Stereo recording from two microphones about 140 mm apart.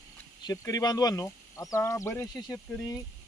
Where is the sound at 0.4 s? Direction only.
25° left (ahead or behind).